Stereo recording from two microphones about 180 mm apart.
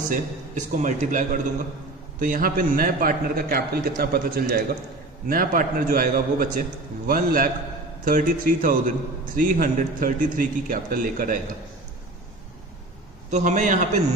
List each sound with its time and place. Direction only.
0.1 s a man's voice: 45° right (ahead or behind)
13.3 s a man's voice: 45° right (ahead or behind)